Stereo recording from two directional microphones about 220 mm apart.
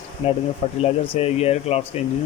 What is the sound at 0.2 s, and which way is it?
Speech, 25° left (ahead or behind).